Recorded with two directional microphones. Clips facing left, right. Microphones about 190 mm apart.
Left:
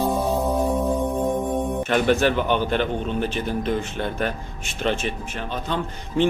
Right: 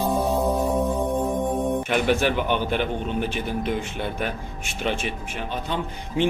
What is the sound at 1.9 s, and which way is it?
A man's voice, 10° right (ahead or behind).